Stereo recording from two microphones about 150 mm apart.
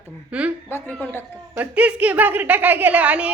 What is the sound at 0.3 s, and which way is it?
Speech, 10° right (ahead or behind).